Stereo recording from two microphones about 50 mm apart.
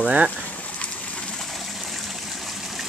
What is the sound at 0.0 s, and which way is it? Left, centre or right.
Speech, right.